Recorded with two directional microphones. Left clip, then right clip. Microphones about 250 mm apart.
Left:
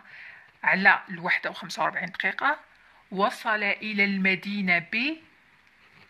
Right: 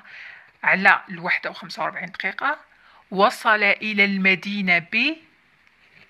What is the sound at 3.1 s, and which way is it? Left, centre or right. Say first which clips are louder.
Speech: right 8 dB; right.